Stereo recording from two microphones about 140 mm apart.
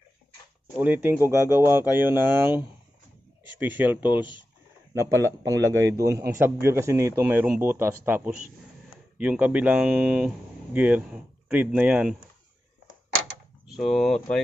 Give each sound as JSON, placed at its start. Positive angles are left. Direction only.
{"t": 0.7, "sound": "a man's voice", "side_deg": -15}
{"t": 13.7, "sound": "speech", "side_deg": 0}